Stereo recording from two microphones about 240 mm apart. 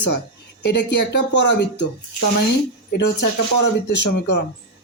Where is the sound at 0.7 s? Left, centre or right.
Left.